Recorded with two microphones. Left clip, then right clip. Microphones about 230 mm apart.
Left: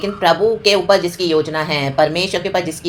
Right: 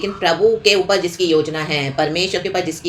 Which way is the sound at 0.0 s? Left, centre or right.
Centre.